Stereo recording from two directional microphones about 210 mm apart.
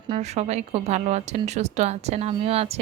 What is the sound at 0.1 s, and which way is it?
Speech, 30° right (ahead or behind).